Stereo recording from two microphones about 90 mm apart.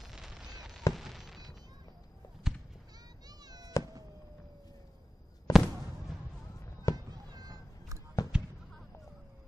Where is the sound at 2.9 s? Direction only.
50° right (ahead or behind).